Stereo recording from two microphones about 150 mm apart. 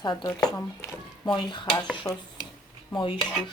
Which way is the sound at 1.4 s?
30° left (ahead or behind).